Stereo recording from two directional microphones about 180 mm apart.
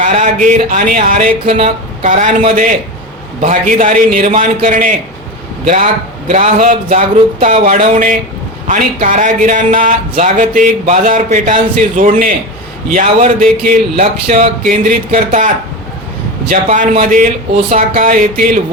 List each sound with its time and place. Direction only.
0.0 s speech: 40° right (ahead or behind)
1.5 s speech: 35° right (ahead or behind)